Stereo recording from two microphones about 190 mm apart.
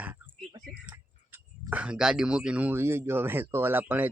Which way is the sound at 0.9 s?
15° right (ahead or behind).